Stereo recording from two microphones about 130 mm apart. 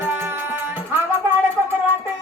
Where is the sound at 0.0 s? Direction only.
15° right (ahead or behind).